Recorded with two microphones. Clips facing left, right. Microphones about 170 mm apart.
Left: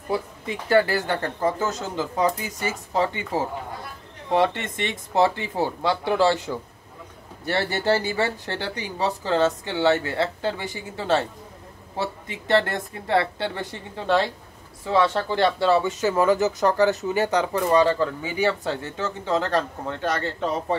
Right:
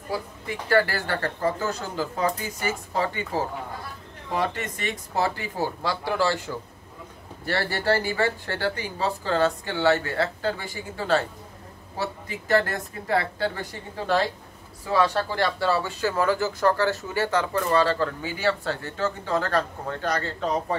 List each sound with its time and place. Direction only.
0.5 s speech: 20° left (ahead or behind)
4.3 s speech: 25° left (ahead or behind)